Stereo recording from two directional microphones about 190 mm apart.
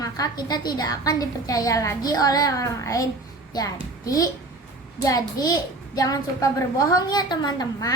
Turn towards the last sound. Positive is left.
turn(degrees=20)  # may be behind; listen again after turning